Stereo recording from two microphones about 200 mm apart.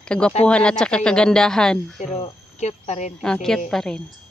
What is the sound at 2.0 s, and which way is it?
Speech, 35° left (ahead or behind).